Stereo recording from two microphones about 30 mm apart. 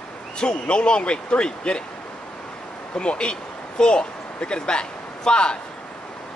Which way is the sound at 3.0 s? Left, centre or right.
Left.